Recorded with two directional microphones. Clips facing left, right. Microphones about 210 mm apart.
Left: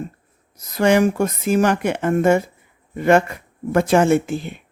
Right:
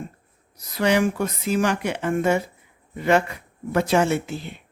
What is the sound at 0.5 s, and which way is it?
Speech, 50° left (ahead or behind).